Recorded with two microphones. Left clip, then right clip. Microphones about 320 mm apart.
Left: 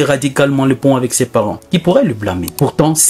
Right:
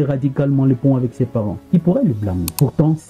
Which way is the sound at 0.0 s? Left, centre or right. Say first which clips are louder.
Left 8 dB; centre.